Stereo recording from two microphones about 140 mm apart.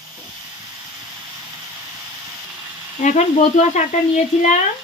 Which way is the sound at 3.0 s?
60° left (ahead or behind).